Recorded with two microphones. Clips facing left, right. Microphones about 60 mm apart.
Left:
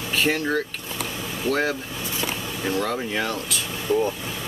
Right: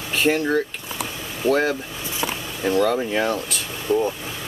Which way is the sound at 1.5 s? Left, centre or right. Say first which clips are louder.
Right 4 dB; right.